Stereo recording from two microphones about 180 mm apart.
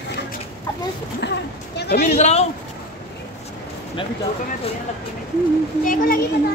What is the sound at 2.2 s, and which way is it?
Speech, 40° left (ahead or behind).